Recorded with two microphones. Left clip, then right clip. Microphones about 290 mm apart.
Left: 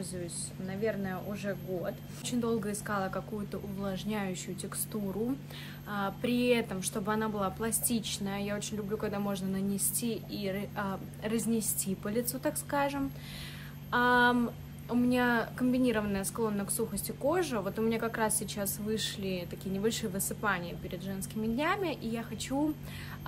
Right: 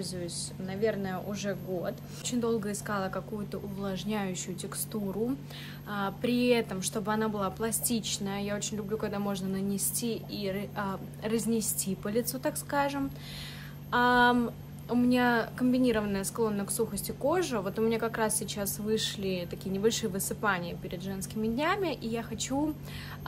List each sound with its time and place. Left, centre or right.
0.7 s speech: centre
5.9 s speech: centre